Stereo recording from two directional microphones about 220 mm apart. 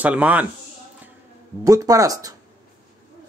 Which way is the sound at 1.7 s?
15° right (ahead or behind).